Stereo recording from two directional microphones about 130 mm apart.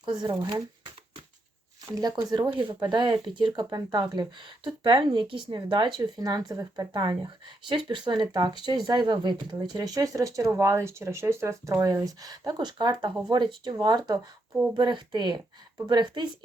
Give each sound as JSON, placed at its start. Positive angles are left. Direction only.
{"t": 0.0, "sound": "speech", "side_deg": -35}
{"t": 1.9, "sound": "speech", "side_deg": -30}